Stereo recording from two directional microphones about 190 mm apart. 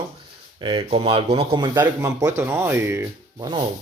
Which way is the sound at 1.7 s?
15° right (ahead or behind).